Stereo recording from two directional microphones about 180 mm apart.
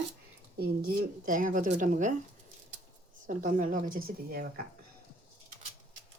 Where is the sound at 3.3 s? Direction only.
45° right (ahead or behind).